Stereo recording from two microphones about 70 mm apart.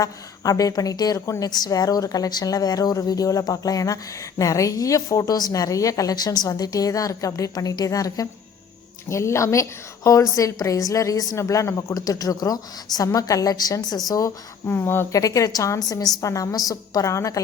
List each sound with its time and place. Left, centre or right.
0.0 s a woman's voice: left
9.0 s a woman's voice: left
14.7 s speech: left
15.1 s a woman's voice: left